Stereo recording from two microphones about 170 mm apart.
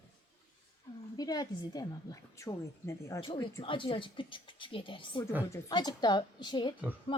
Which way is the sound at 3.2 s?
30° left (ahead or behind).